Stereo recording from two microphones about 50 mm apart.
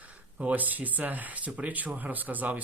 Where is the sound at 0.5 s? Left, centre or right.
Right.